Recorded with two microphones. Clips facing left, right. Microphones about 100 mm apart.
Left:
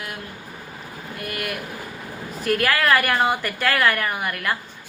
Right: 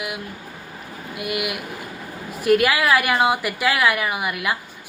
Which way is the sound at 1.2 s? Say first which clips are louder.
Right 4 dB; 10° right (ahead or behind).